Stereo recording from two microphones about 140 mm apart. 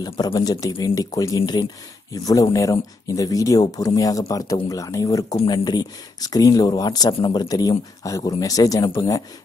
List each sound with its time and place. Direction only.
0.0 s speech: 30° left (ahead or behind)